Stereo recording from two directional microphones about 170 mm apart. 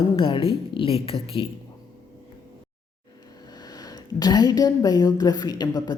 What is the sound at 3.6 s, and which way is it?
A woman's voice, 25° left (ahead or behind).